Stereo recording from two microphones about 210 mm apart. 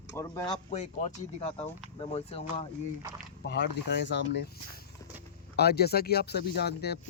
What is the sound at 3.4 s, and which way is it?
Speech, 55° left (ahead or behind).